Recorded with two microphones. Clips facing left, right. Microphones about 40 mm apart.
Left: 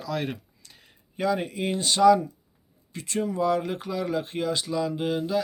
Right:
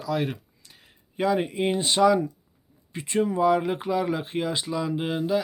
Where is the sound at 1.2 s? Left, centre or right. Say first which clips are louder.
Right 2 dB; centre.